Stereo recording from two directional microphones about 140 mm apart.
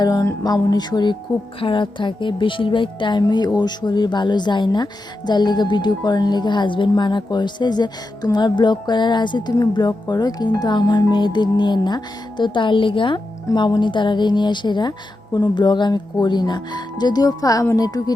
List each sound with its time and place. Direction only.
0.0 s speech: 25° left (ahead or behind)